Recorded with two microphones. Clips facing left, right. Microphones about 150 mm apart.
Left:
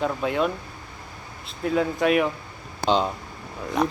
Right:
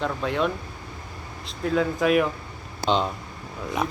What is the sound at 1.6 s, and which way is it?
Speech, centre (ahead or behind).